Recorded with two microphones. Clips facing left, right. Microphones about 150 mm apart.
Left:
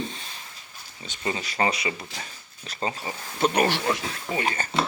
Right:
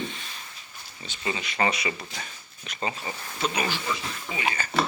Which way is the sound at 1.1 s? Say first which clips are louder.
Left 2 dB; 40° left (ahead or behind).